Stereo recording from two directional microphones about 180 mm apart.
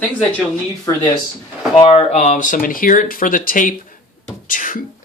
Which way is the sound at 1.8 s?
40° left (ahead or behind).